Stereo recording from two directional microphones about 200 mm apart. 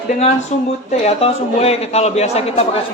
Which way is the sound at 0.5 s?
35° left (ahead or behind).